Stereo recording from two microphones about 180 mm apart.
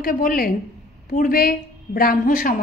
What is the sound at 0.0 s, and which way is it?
A woman's voice, 50° left (ahead or behind).